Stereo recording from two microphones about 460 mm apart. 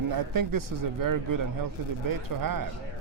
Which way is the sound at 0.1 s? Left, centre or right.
Right.